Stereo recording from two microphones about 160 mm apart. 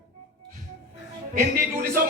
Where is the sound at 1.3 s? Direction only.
60° right (ahead or behind).